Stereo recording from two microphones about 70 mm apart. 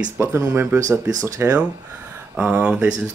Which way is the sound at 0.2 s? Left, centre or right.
Right.